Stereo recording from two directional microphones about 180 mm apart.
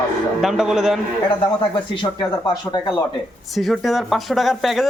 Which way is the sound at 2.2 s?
20° left (ahead or behind).